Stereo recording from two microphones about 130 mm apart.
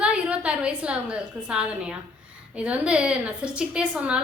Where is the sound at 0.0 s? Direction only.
10° right (ahead or behind).